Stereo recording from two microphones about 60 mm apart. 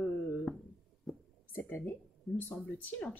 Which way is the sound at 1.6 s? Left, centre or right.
Left.